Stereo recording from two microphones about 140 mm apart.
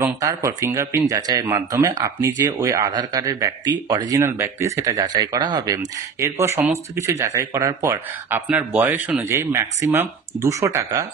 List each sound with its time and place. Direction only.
0.0 s speech: 25° right (ahead or behind)
8.5 s speech: 10° right (ahead or behind)